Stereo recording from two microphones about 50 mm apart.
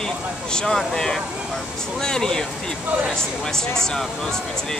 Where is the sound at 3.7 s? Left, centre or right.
Centre.